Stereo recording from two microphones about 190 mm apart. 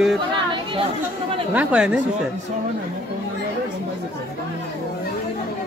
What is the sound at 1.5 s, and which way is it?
Speech, 5° right (ahead or behind).